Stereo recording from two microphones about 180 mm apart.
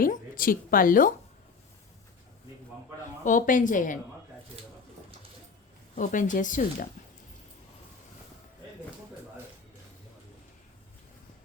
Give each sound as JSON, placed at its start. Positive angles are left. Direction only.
{"t": 0.0, "sound": "a woman's voice", "side_deg": 50}
{"t": 3.2, "sound": "speech", "side_deg": 45}
{"t": 6.0, "sound": "speech", "side_deg": 45}